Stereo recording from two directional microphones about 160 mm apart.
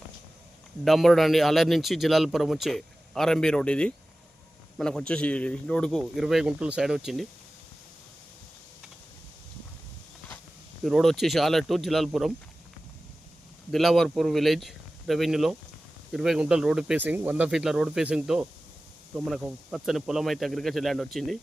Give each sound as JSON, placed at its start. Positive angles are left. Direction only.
{"t": 0.9, "sound": "speech", "side_deg": 0}
{"t": 10.8, "sound": "speech", "side_deg": 0}
{"t": 13.7, "sound": "speech", "side_deg": 0}